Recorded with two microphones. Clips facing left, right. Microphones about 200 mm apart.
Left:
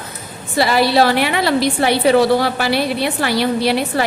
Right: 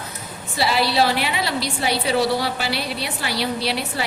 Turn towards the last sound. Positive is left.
turn(degrees=50)  # may be behind; listen again after turning